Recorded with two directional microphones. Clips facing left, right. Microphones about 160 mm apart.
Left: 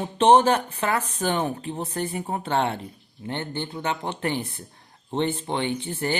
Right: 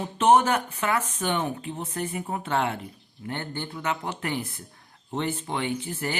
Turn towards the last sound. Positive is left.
turn(degrees=30)  # may be behind; listen again after turning